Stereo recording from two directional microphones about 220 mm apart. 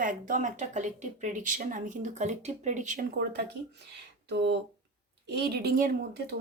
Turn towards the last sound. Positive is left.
turn(degrees=-40)  # may be behind; listen again after turning